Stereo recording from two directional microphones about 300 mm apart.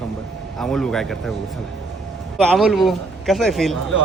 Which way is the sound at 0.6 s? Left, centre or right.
Centre.